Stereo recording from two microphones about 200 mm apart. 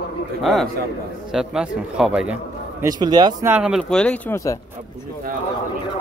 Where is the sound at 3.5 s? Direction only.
5° right (ahead or behind).